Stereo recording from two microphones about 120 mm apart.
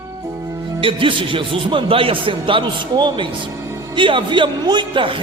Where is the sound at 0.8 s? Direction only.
45° right (ahead or behind).